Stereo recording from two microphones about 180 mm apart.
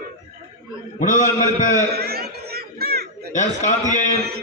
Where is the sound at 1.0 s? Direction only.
45° left (ahead or behind).